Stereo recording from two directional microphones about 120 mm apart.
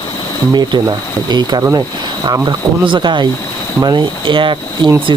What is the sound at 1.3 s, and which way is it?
Speech, 35° right (ahead or behind).